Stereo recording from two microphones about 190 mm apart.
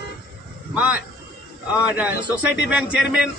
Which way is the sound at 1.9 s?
5° right (ahead or behind).